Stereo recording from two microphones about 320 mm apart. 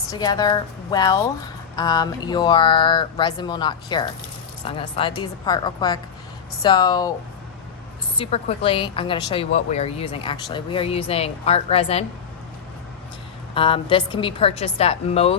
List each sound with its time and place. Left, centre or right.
0.1 s speech: centre
8.2 s speech: centre
13.5 s a woman's voice: centre